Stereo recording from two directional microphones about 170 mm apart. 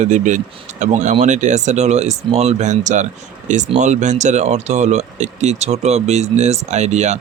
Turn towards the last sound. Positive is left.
turn(degrees=-40)  # may be behind; listen again after turning